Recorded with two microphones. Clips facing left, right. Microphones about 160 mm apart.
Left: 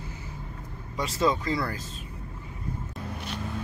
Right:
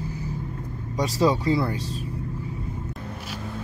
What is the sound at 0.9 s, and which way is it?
Speech, 35° right (ahead or behind).